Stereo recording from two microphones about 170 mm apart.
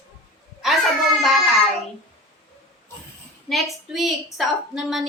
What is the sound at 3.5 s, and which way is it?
A woman's voice, centre (ahead or behind).